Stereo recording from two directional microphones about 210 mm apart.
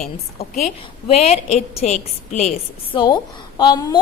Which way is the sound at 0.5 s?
30° left (ahead or behind).